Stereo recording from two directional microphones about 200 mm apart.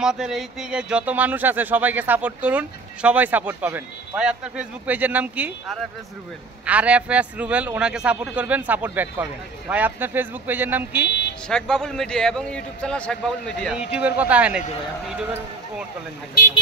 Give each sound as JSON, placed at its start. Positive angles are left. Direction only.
{"t": 0.0, "sound": "speech", "side_deg": -5}
{"t": 11.1, "sound": "vehicle", "side_deg": 55}
{"t": 11.4, "sound": "a man's voice", "side_deg": 5}